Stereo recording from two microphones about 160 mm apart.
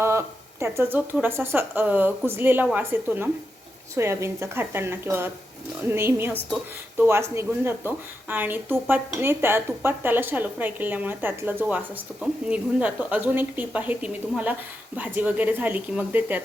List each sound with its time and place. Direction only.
0.0 s a woman's voice: 15° right (ahead or behind)